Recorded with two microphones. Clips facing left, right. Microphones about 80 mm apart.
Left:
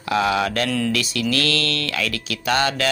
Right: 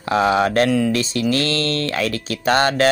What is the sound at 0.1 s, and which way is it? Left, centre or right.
Speech, right.